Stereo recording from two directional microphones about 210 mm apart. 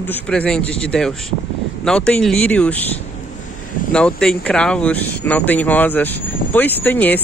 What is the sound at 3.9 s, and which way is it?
Speech, 5° left (ahead or behind).